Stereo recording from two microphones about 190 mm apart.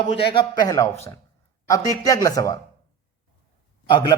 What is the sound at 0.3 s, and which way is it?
Speech, 20° left (ahead or behind).